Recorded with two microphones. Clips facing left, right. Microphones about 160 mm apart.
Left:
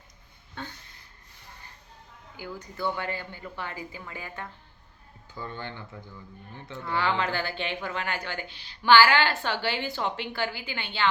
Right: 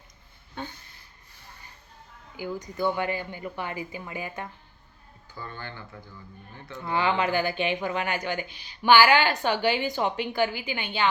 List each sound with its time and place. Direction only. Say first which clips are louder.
0.6 s a sound: right 3 dB; 15° right (ahead or behind)
2.3 s speech: right 6 dB; 15° right (ahead or behind)
5.3 s speech: left 2 dB; 20° left (ahead or behind)
6.7 s speech: right 2 dB; 20° right (ahead or behind)